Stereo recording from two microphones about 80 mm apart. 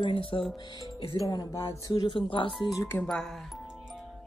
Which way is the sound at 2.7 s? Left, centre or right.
Left.